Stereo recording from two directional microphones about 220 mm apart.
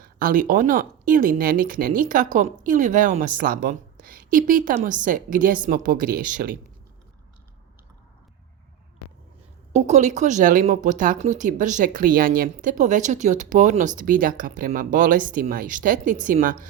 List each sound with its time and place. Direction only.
0.0 s speech: 40° right (ahead or behind)
9.7 s speech: 30° right (ahead or behind)